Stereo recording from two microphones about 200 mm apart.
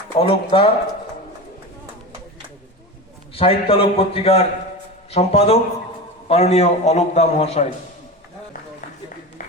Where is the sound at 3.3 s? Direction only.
30° left (ahead or behind).